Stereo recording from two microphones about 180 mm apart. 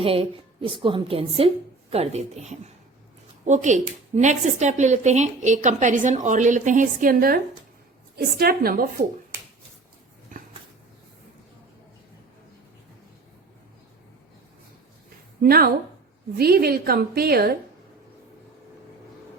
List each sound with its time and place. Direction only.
0.0 s a woman's voice: 30° right (ahead or behind); by 9.0 s 50° right (ahead or behind)
10.3 s a sound: 45° right (ahead or behind)
15.4 s a woman's voice: 55° right (ahead or behind)